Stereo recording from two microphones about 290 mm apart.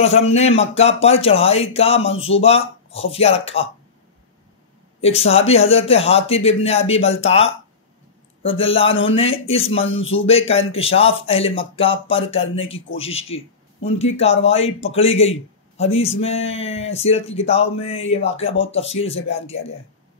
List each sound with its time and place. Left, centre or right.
0.2 s speech: left
5.0 s speech: left
8.4 s speech: centre
9.8 s speech: left
10.2 s speech: left